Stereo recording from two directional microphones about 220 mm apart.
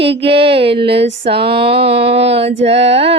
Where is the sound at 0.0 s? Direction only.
25° right (ahead or behind).